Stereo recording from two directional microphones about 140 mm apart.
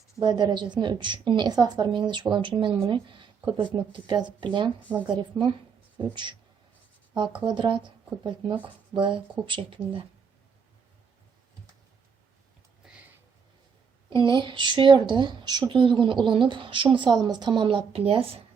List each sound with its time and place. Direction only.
0.2 s a woman's voice: 30° right (ahead or behind)
7.4 s a woman's voice: 35° right (ahead or behind)
14.1 s a woman's voice: 35° right (ahead or behind)